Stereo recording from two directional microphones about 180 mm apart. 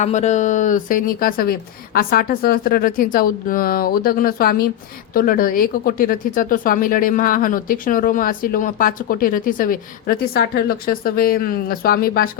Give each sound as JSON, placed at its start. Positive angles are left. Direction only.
{"t": 0.0, "sound": "speech", "side_deg": 40}